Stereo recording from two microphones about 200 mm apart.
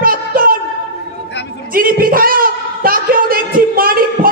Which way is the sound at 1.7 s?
45° right (ahead or behind).